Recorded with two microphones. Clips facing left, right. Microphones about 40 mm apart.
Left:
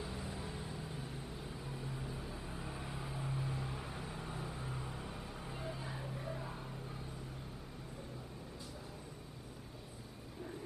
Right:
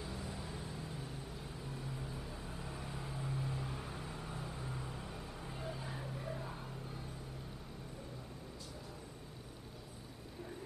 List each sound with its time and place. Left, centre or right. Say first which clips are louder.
0.0 s vehicle: left 1 dB; centre